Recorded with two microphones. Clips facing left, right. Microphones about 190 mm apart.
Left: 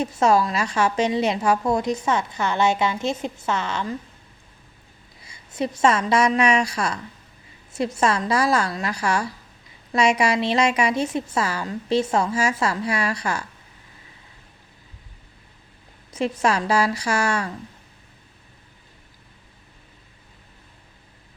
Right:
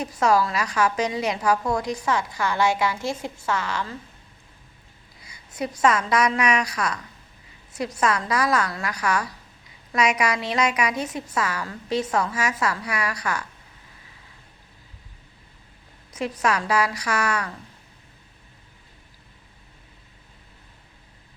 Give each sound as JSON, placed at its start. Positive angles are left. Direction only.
{"t": 0.0, "sound": "a woman's voice", "side_deg": 25}
{"t": 5.2, "sound": "a woman's voice", "side_deg": 25}
{"t": 16.1, "sound": "a woman's voice", "side_deg": 25}